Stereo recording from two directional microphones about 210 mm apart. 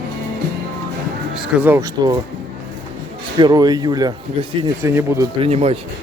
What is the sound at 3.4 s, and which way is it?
A man's voice, 20° right (ahead or behind).